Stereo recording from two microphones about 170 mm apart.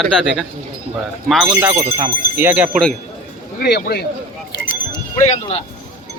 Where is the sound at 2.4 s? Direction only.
10° right (ahead or behind).